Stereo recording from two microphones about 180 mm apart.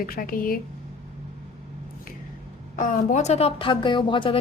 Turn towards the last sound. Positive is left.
turn(degrees=30)  # may be behind; listen again after turning